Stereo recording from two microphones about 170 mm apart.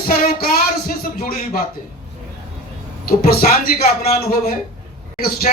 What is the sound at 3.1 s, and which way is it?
A man's voice, 60° left (ahead or behind).